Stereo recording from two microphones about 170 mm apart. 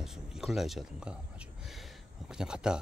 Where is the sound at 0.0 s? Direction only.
Centre (ahead or behind).